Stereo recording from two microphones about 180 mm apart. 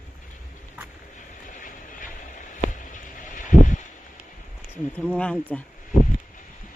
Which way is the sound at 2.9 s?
45° left (ahead or behind).